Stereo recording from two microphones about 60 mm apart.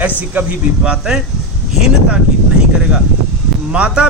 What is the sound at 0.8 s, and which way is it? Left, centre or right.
Speech, centre.